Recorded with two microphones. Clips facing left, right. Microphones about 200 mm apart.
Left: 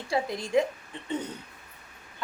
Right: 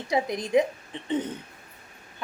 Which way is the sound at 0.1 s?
20° right (ahead or behind).